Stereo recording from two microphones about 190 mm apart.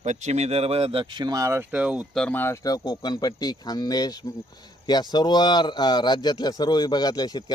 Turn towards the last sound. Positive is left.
turn(degrees=20)  # may be behind; listen again after turning